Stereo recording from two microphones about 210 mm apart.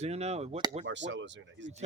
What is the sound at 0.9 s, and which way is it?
Speech, 60° right (ahead or behind).